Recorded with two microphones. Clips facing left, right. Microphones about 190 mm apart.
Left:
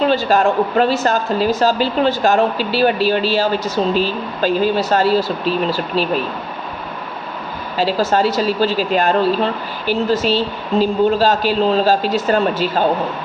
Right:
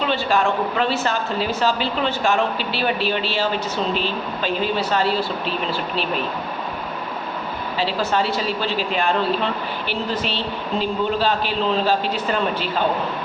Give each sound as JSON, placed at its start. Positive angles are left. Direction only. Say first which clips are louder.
{"t": 0.1, "sound": "a woman's voice", "louder": "left 5 dB", "side_deg": 40}
{"t": 7.8, "sound": "a woman's voice", "louder": "left 6 dB", "side_deg": 40}